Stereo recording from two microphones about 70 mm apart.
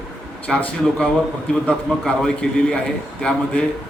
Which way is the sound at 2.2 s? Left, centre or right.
Centre.